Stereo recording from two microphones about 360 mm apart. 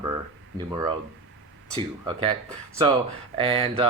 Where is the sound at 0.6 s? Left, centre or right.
Centre.